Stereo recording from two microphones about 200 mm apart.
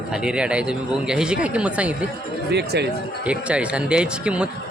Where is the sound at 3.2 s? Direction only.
5° right (ahead or behind).